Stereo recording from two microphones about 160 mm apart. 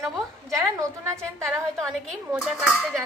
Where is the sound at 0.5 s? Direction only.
20° right (ahead or behind).